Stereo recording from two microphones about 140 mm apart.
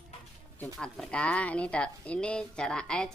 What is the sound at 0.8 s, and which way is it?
A woman's voice, 5° left (ahead or behind).